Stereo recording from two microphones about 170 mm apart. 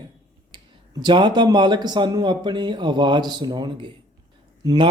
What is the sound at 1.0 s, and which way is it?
Speech, 25° right (ahead or behind).